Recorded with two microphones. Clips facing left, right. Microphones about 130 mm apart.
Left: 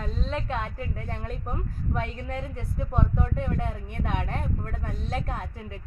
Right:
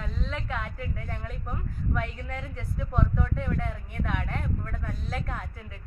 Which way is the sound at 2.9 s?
20° left (ahead or behind).